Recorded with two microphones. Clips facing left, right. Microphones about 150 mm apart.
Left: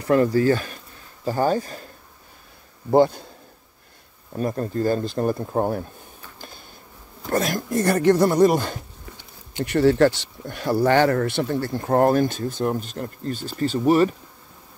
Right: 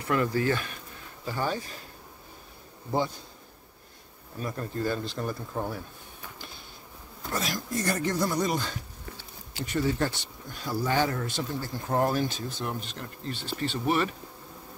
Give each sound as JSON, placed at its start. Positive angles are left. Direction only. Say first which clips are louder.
{"t": 0.1, "sound": "speech", "louder": "left 8 dB", "side_deg": 35}
{"t": 2.9, "sound": "speech", "louder": "left 12 dB", "side_deg": 60}
{"t": 4.4, "sound": "speech", "louder": "left 8 dB", "side_deg": 40}
{"t": 7.2, "sound": "speech", "louder": "left 9 dB", "side_deg": 55}
{"t": 9.7, "sound": "speech", "louder": "left 11 dB", "side_deg": 70}